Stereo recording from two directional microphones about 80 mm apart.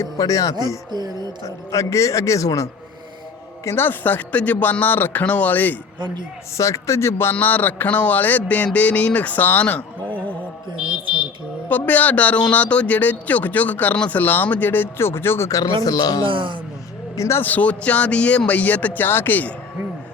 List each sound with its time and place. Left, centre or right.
0.2 s speech: left
0.9 s a sound: right
1.5 s a man's voice: left
3.6 s speech: left
6.6 s speech: left
10.8 s a sound: centre
11.7 s speech: left
15.4 s speech: left
16.3 s speech: right
17.2 s a man's voice: left
17.4 s speech: centre